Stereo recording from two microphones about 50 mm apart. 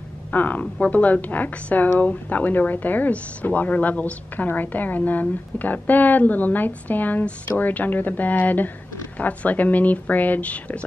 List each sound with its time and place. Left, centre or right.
0.3 s a woman's voice: left